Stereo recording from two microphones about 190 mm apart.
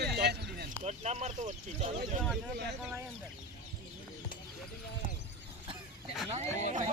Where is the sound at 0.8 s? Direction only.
35° right (ahead or behind).